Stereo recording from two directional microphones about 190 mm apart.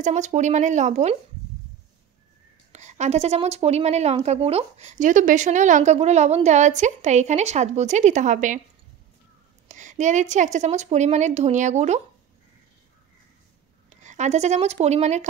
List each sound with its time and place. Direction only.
0.0 s a woman's voice: 40° right (ahead or behind)
2.7 s a woman's voice: 35° right (ahead or behind)
9.7 s a woman's voice: 40° right (ahead or behind)
13.8 s speech: 40° right (ahead or behind)